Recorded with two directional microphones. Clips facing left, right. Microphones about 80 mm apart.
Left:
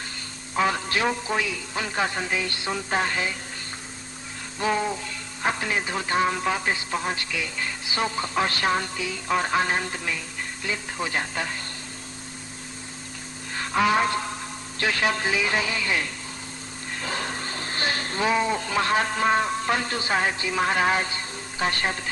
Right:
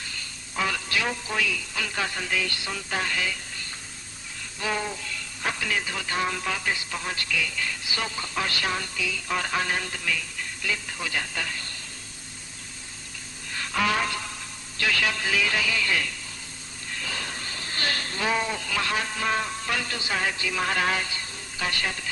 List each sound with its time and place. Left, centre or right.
0.5 s a sound: left
0.8 s music: left
1.0 s speech: left
4.7 s music: centre
5.0 s speech: left
13.5 s a sound: left
14.8 s music: left
15.4 s speech: left
16.9 s vehicle: left
18.4 s music: left
19.2 s speech: left
21.0 s music: left